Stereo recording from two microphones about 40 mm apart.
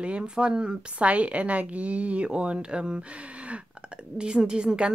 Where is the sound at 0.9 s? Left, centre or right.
Right.